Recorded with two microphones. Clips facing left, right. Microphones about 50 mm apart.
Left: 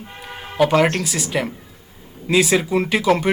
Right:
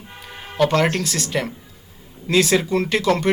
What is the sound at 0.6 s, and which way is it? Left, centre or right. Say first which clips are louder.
A man's voice: left 2 dB; centre.